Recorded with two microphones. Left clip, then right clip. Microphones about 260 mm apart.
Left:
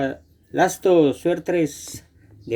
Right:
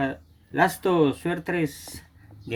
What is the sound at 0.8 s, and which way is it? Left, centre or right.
Speech, right.